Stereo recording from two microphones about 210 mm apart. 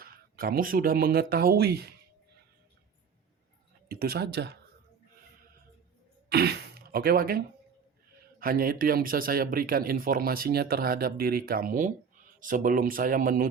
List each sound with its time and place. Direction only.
0.0 s speech: 45° right (ahead or behind)
3.8 s speech: 45° right (ahead or behind)
6.2 s speech: 50° right (ahead or behind)